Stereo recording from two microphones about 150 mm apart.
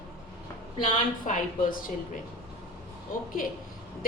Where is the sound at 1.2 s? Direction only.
65° left (ahead or behind).